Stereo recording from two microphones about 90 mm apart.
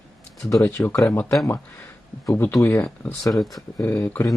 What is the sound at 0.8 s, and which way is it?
Speech, 25° left (ahead or behind).